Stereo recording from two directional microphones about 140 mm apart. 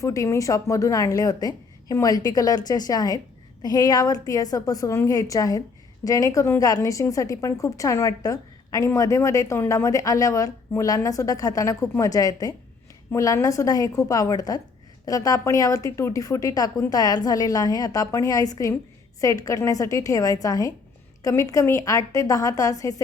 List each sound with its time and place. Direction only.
0.0 s a woman's voice: 20° left (ahead or behind)